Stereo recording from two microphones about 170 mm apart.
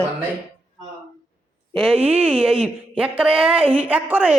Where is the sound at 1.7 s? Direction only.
5° right (ahead or behind).